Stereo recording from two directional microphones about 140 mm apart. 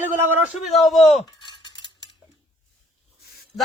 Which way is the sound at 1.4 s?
30° left (ahead or behind).